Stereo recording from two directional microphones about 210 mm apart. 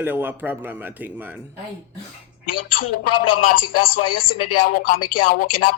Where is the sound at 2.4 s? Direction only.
40° left (ahead or behind).